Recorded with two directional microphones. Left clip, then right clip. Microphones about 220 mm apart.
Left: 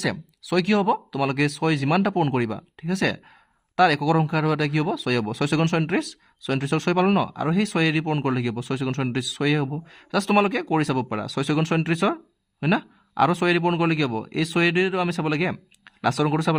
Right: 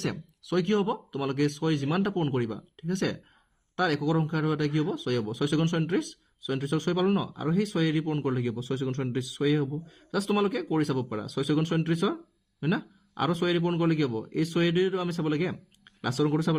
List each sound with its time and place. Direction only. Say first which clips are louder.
0.0 s speech: left 7 dB; 40° left (ahead or behind)